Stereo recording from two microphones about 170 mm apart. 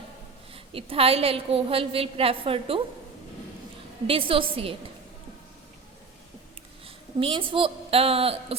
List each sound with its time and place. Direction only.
0.5 s a woman's voice: 35° right (ahead or behind)
4.0 s a woman's voice: 30° right (ahead or behind)
6.8 s a woman's voice: 30° right (ahead or behind)